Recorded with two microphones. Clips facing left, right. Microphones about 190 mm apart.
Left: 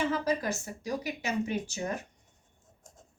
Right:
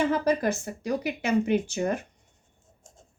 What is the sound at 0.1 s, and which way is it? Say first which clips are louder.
Speech: right 6 dB; 60° right (ahead or behind).